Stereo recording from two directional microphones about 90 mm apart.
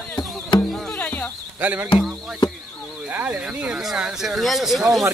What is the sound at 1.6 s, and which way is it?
Speech, 20° right (ahead or behind).